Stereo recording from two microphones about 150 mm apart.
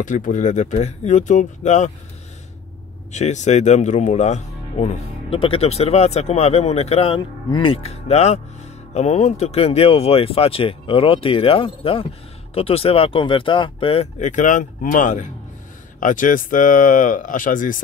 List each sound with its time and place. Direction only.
0.0 s speech: 60° left (ahead or behind)
3.1 s speech: 50° left (ahead or behind)
14.2 s speech: 55° left (ahead or behind)